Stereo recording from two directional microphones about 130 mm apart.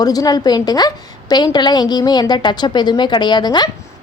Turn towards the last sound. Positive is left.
turn(degrees=35)  # may be behind; listen again after turning